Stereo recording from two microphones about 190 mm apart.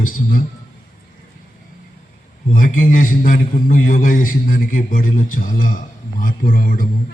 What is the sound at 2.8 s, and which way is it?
A man's voice, 45° left (ahead or behind).